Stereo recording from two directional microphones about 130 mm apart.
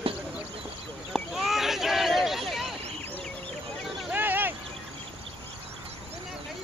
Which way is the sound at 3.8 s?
Centre (ahead or behind).